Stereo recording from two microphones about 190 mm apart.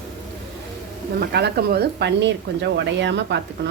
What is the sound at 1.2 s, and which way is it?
Speech, 60° right (ahead or behind).